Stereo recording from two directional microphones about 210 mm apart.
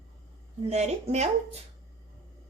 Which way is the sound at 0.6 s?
30° right (ahead or behind).